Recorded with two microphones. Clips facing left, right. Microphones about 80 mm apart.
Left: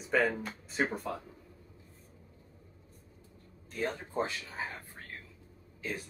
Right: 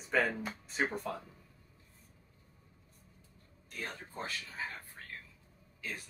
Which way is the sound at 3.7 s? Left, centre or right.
Left.